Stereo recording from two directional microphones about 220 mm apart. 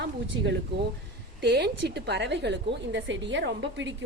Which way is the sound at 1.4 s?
50° right (ahead or behind).